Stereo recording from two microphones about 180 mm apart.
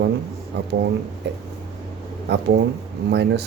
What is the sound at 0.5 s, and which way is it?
Speech, 70° right (ahead or behind).